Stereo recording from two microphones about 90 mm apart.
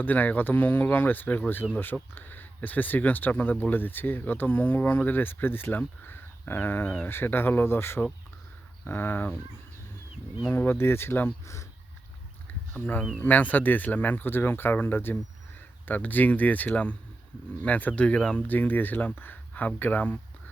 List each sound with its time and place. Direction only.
0.0 s speech: 20° left (ahead or behind)
10.5 s speech: 25° left (ahead or behind)
12.7 s speech: 20° left (ahead or behind)